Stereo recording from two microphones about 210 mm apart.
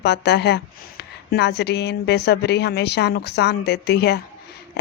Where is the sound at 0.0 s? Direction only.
50° left (ahead or behind).